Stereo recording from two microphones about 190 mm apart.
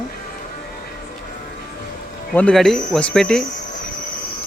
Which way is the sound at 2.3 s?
5° left (ahead or behind).